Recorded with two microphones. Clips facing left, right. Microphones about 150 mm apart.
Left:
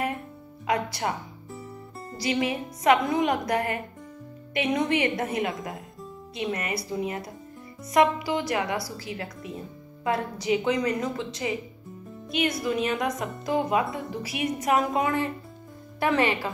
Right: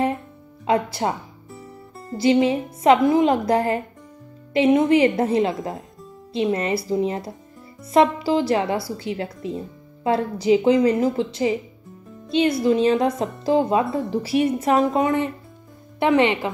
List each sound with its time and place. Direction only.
0.7 s a woman's voice: 30° right (ahead or behind)
2.1 s a woman's voice: 25° right (ahead or behind)